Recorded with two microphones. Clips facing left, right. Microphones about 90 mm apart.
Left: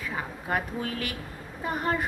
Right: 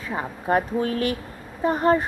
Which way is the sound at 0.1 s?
30° right (ahead or behind).